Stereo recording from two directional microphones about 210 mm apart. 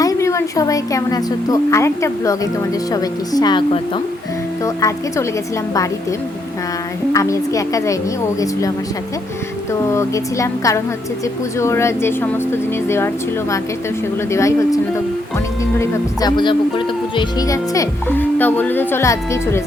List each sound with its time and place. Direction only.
0.0 s a woman's voice: 15° left (ahead or behind)
7.1 s speech: 15° left (ahead or behind)
9.9 s speech: 15° left (ahead or behind)
14.3 s speech: 15° left (ahead or behind)